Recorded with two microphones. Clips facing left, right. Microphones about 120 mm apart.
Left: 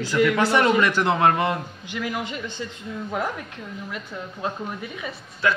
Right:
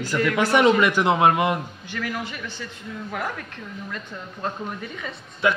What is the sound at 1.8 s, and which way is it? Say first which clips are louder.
A man's voice: left 1 dB; 15° left (ahead or behind).